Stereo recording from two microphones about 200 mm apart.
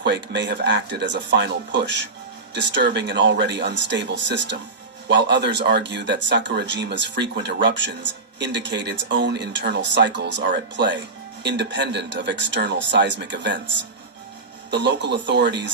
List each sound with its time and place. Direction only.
0.0 s speech: 60° right (ahead or behind)
14.7 s speech: 60° right (ahead or behind)